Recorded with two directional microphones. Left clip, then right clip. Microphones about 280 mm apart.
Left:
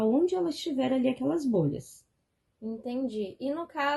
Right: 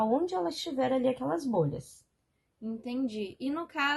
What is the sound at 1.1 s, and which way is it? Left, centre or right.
Speech, right.